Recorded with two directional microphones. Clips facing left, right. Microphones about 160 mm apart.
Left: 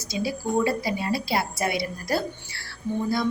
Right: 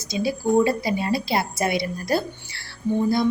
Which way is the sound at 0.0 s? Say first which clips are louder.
Right 4 dB; 20° right (ahead or behind).